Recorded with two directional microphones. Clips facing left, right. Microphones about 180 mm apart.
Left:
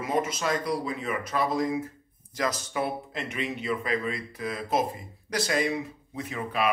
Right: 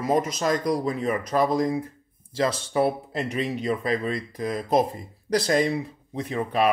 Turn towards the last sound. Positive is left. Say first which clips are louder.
# right 5 dB
turn(degrees=-35)  # may be behind; listen again after turning